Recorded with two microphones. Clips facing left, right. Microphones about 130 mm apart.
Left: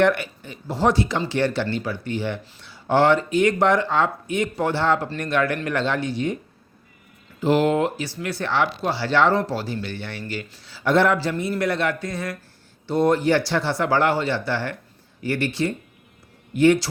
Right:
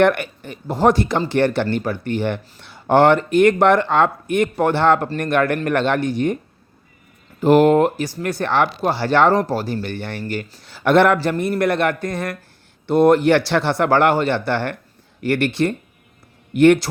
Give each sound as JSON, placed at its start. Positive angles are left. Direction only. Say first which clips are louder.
{"t": 0.0, "sound": "speech", "louder": "right 3 dB", "side_deg": -55}